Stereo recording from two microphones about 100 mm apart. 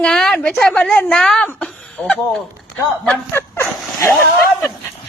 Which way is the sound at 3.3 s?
25° left (ahead or behind).